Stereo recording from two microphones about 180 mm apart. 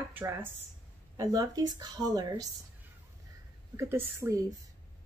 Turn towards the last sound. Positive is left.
turn(degrees=-15)  # may be behind; listen again after turning